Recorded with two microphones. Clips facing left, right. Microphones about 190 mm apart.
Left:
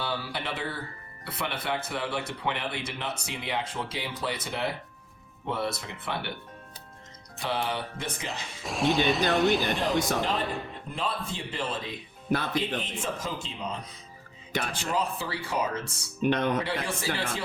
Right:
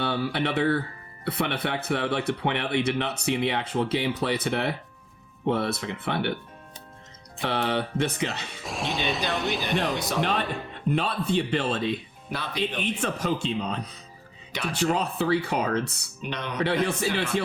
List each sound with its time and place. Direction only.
0.0 s speech: 60° right (ahead or behind)
7.4 s speech: 65° right (ahead or behind)
8.6 s speech: centre (ahead or behind)
10.2 s speech: 70° right (ahead or behind)
10.4 s speech: centre (ahead or behind)
10.9 s speech: 70° right (ahead or behind)
16.2 s speech: 50° left (ahead or behind)
16.6 s speech: 60° right (ahead or behind)